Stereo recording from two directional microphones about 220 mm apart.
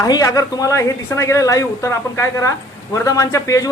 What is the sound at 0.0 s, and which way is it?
A man's voice, 15° left (ahead or behind).